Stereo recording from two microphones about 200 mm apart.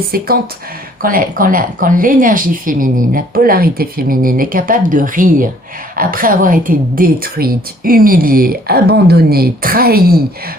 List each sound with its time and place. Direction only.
0.1 s a woman's voice: 50° right (ahead or behind)